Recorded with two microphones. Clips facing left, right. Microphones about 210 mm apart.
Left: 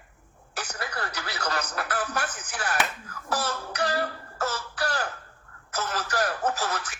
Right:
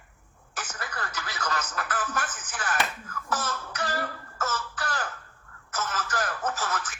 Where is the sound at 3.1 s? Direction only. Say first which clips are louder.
Left 2 dB; 35° left (ahead or behind).